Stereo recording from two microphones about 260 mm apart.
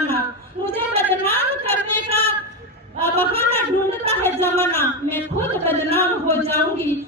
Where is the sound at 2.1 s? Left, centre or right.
Right.